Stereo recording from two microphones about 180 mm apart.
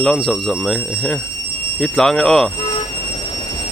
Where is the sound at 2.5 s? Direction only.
25° left (ahead or behind).